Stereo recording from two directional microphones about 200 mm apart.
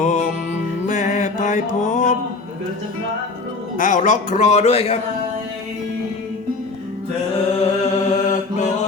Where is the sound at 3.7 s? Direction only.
40° left (ahead or behind).